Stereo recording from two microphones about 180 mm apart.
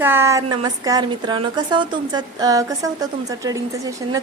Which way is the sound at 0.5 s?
25° right (ahead or behind).